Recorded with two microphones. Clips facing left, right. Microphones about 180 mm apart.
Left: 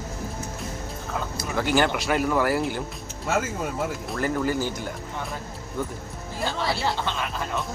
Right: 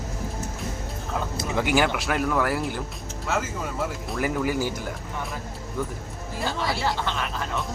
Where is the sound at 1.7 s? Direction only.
Centre (ahead or behind).